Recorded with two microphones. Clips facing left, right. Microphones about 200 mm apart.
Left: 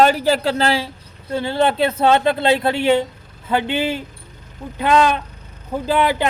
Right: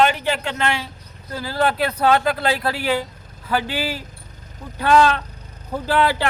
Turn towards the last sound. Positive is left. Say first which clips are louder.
# left 2 dB
turn(degrees=20)  # may be behind; listen again after turning